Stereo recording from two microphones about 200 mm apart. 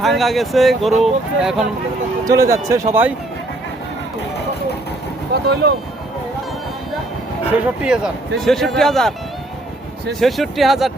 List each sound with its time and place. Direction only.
0.0 s speech: centre (ahead or behind)
2.2 s speech: 15° right (ahead or behind)
5.3 s speech: 55° right (ahead or behind)
7.8 s speech: 5° right (ahead or behind)